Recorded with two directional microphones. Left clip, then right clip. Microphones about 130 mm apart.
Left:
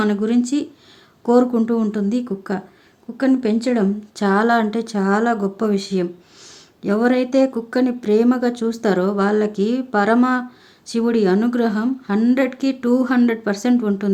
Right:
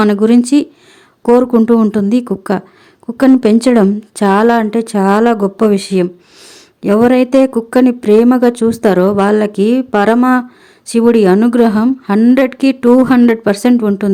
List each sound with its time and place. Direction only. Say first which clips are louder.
0.0 s speech: right 9 dB; 55° right (ahead or behind)